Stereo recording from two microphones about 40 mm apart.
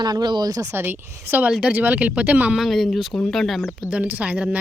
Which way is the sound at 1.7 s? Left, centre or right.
Right.